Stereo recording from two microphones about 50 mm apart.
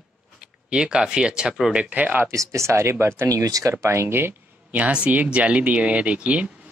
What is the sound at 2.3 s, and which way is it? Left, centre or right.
Speech, right.